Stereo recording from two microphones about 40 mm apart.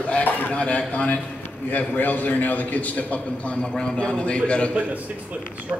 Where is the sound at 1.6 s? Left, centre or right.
Left.